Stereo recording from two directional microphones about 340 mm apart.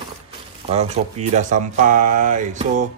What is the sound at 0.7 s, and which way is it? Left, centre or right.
Speech, centre.